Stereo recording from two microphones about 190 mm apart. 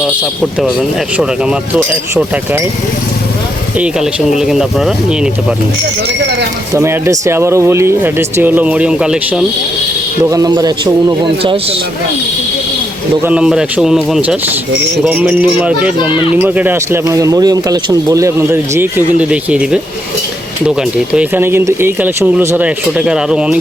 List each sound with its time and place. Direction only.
1.1 s speech: 5° right (ahead or behind)
3.8 s speech: 5° right (ahead or behind)
6.7 s speech: 15° right (ahead or behind)
10.2 s a man's voice: 20° right (ahead or behind)
13.2 s speech: 5° right (ahead or behind)